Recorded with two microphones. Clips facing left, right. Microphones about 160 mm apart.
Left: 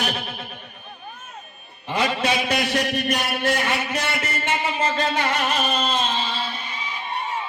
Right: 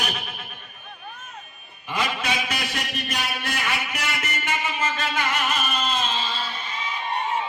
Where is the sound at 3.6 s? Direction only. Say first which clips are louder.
Left 4 dB; 30° left (ahead or behind).